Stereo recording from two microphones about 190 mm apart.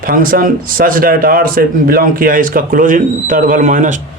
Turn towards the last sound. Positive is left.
turn(degrees=-40)  # may be behind; listen again after turning